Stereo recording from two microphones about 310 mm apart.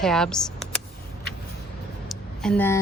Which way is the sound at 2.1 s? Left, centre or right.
Centre.